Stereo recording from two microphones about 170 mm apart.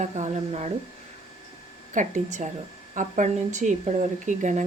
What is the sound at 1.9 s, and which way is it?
A woman's voice, 45° right (ahead or behind).